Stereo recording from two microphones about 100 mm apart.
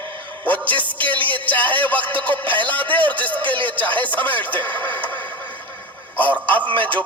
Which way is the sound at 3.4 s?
55° right (ahead or behind).